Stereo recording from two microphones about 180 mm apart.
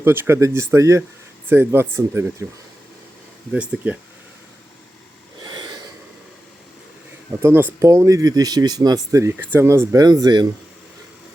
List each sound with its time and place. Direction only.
0.0 s speech: 15° right (ahead or behind)
3.5 s speech: 5° right (ahead or behind)
5.4 s a sound: 25° right (ahead or behind)
7.4 s speech: 15° right (ahead or behind)